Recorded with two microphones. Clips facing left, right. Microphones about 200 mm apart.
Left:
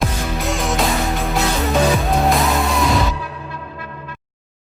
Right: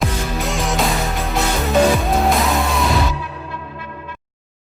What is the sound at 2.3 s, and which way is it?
Music, centre (ahead or behind).